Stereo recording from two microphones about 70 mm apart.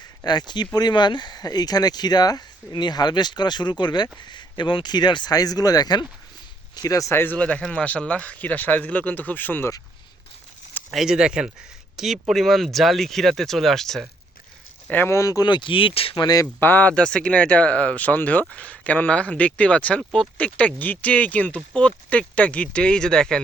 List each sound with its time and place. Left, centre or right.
0.3 s speech: left
6.7 s speech: left
7.1 s speech: left
7.3 s speech: centre
10.9 s speech: centre
14.8 s speech: left
15.1 s speech: left
15.4 s speech: left
16.2 s speech: left
16.6 s speech: left
16.9 s speech: centre